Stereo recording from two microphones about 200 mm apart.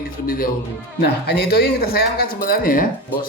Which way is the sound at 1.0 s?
55° left (ahead or behind).